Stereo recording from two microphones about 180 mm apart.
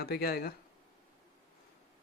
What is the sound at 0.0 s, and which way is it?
Speech, 60° left (ahead or behind).